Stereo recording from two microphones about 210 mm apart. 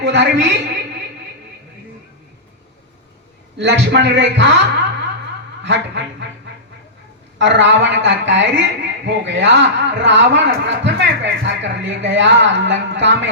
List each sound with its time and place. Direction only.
0.0 s a woman's voice: 55° right (ahead or behind)
3.6 s a man's voice: 55° right (ahead or behind)
7.3 s a man's voice: 55° right (ahead or behind)